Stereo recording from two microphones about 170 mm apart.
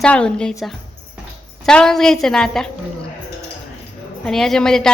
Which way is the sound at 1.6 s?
5° left (ahead or behind).